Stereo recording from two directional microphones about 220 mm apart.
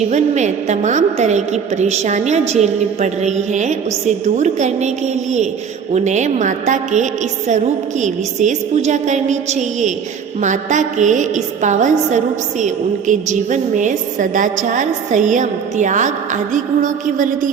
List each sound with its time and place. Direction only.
0.1 s a woman's voice: 30° right (ahead or behind)